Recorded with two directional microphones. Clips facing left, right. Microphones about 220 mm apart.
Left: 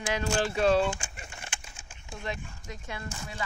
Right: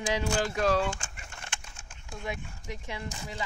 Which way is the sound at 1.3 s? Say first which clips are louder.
Even; 5° left (ahead or behind).